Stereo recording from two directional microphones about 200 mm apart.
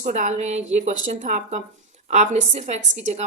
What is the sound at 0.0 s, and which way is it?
A woman's voice, 40° right (ahead or behind).